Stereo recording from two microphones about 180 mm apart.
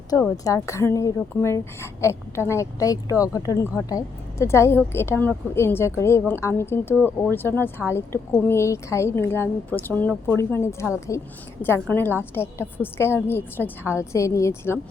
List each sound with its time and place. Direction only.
0.1 s a woman's voice: 15° left (ahead or behind)